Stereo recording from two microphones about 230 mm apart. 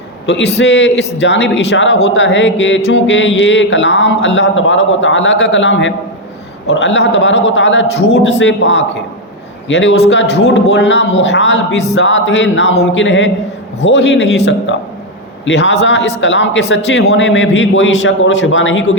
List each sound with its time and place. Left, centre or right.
0.3 s a man's voice: left